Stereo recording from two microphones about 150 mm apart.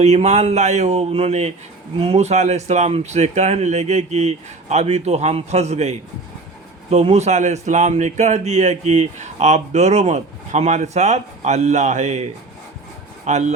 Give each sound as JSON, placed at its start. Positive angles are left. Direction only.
{"t": 0.0, "sound": "speech", "side_deg": -45}